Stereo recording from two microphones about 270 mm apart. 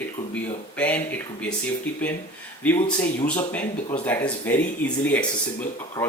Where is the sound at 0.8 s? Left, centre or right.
Centre.